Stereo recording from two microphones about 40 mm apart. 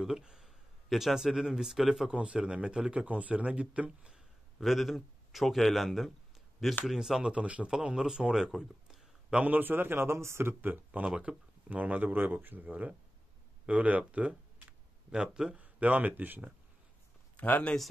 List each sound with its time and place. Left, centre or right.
0.0 s a sound: centre
0.8 s speech: centre
2.0 s a man's voice: right
4.6 s a man's voice: centre
6.9 s a man's voice: centre; by 7.7 s right
7.8 s speech: centre
9.3 s speech: right
9.6 s speech: right
10.7 s speech: right
12.1 s speech: right
15.0 s speech: centre
15.5 s speech: right